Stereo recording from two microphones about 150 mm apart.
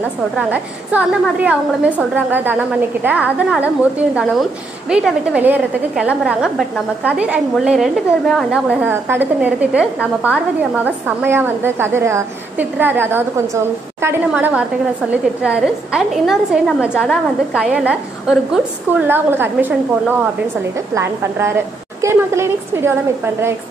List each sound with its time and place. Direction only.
0.4 s a woman's voice: 10° right (ahead or behind)
20.9 s a woman's voice: 15° right (ahead or behind)